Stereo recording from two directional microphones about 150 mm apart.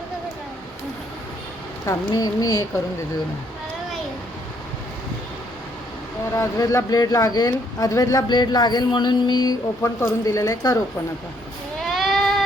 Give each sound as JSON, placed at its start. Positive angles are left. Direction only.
{"t": 1.8, "sound": "speech", "side_deg": 25}
{"t": 6.3, "sound": "speech", "side_deg": 20}
{"t": 11.9, "sound": "a sound", "side_deg": 0}